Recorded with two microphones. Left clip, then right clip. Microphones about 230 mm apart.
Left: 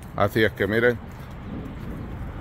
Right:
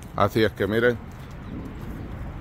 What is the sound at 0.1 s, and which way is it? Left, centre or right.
Speech, centre.